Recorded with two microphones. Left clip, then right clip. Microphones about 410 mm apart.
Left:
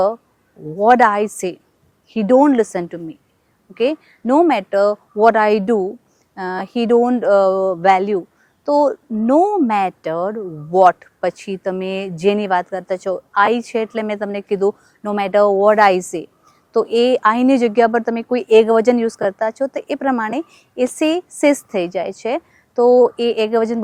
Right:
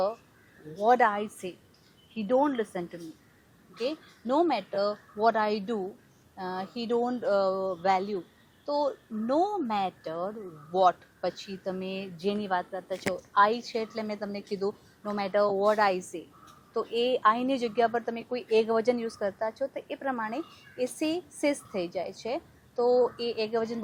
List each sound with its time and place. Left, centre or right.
0.8 s speech: left
2.1 s speech: left
13.3 s speech: left